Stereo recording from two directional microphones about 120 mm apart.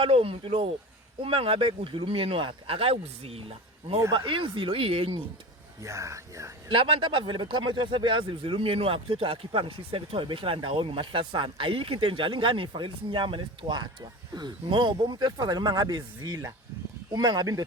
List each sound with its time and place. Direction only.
0.0 s speech: 50° right (ahead or behind)
5.8 s speech: 25° right (ahead or behind)
6.7 s speech: 45° right (ahead or behind); by 17.7 s 30° right (ahead or behind)